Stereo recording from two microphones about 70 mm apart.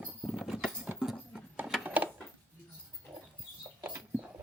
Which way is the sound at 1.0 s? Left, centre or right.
Centre.